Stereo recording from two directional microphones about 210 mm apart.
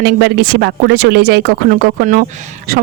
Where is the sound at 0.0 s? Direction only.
50° right (ahead or behind).